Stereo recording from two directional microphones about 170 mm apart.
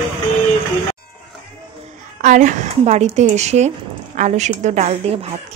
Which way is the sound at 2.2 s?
45° right (ahead or behind).